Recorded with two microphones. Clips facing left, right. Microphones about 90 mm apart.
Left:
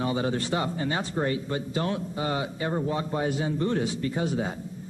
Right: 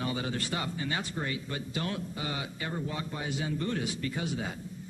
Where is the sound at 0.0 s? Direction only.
30° left (ahead or behind).